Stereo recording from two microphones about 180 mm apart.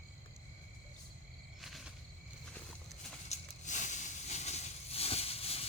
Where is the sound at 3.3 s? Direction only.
45° left (ahead or behind).